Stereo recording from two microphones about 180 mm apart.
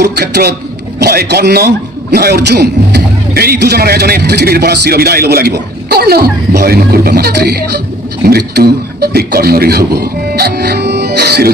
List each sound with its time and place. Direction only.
0.0 s a man's voice: 65° right (ahead or behind)